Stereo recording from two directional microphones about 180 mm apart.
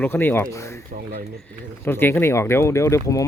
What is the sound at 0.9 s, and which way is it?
Speech, 55° right (ahead or behind).